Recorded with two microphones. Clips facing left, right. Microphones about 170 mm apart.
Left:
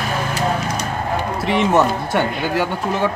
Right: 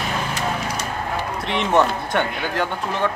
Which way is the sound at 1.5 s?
5° left (ahead or behind).